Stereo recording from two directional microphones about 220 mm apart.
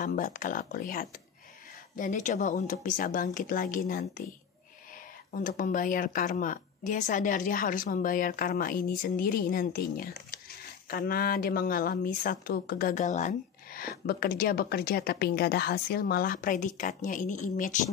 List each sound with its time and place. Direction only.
0.0 s speech: 40° left (ahead or behind)
5.3 s speech: 40° left (ahead or behind)